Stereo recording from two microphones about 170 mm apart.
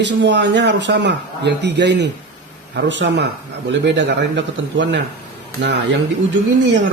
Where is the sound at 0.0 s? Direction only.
90° right.